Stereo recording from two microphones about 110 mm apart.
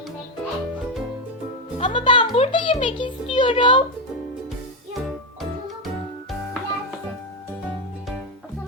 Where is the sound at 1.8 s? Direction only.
50° left (ahead or behind).